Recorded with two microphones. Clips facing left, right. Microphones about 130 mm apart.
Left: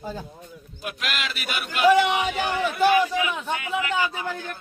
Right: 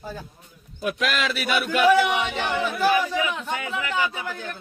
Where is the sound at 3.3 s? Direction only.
10° left (ahead or behind).